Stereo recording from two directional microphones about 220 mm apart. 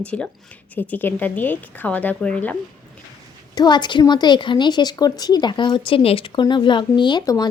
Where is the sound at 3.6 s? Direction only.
20° left (ahead or behind).